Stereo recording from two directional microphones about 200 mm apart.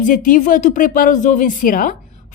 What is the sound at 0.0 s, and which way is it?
A woman's voice, 40° left (ahead or behind).